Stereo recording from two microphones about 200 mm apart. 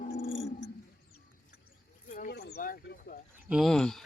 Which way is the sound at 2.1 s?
40° left (ahead or behind).